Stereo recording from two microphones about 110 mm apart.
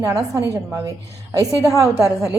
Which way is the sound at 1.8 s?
30° right (ahead or behind).